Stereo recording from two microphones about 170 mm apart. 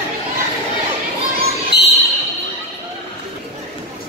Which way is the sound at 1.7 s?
90° left.